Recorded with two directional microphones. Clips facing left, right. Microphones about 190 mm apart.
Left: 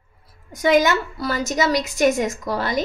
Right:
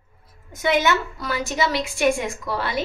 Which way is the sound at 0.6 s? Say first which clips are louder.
Left 3 dB; 40° left (ahead or behind).